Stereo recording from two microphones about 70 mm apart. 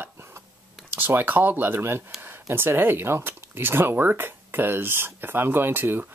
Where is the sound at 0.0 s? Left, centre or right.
Right.